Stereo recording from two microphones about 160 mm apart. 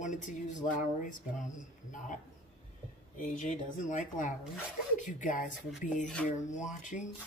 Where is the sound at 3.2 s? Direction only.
50° left (ahead or behind).